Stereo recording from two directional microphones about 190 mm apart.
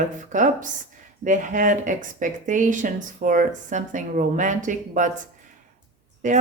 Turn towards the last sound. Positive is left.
turn(degrees=-40)  # may be behind; listen again after turning